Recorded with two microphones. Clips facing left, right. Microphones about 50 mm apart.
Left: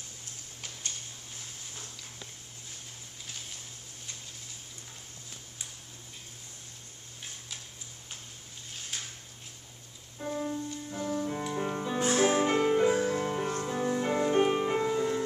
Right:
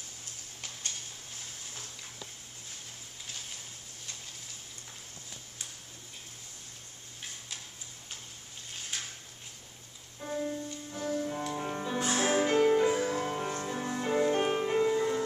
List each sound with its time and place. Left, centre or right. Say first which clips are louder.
10.3 s music: even; centre